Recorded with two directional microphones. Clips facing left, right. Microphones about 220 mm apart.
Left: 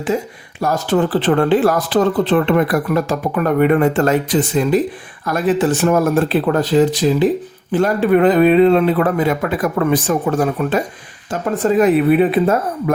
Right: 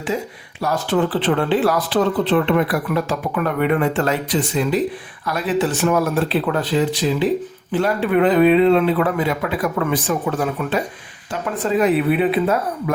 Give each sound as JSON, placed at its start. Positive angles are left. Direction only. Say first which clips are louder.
{"t": 0.6, "sound": "speech", "louder": "left 3 dB", "side_deg": 45}